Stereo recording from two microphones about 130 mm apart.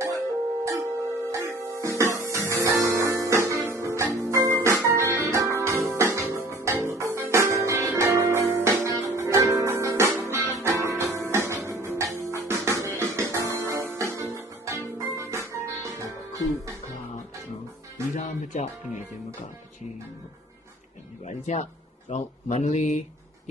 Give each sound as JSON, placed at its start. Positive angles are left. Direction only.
{"t": 0.7, "sound": "music", "side_deg": -25}
{"t": 18.1, "sound": "music", "side_deg": 75}
{"t": 21.3, "sound": "speech", "side_deg": 60}